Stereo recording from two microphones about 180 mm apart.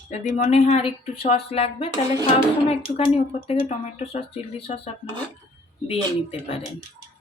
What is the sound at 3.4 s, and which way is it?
Speech, 35° left (ahead or behind).